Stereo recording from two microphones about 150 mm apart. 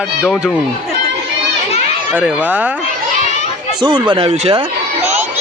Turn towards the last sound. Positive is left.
turn(degrees=-40)  # may be behind; listen again after turning